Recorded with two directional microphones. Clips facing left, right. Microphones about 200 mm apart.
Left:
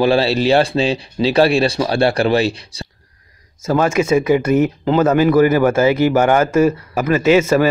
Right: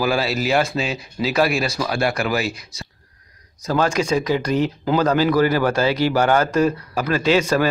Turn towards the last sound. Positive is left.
turn(degrees=5)  # may be behind; listen again after turning